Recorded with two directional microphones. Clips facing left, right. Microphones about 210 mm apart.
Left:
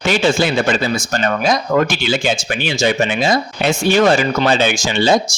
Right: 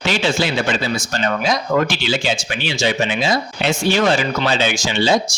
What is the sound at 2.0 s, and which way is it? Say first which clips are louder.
Speech: left 3 dB; 50° left (ahead or behind).